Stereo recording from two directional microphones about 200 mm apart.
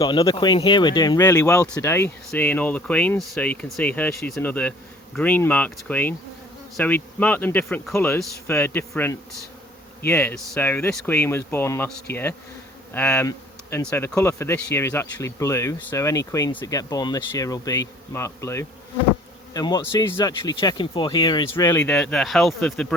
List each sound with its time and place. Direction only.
0.0 s speech: 25° left (ahead or behind); by 23.0 s 5° left (ahead or behind)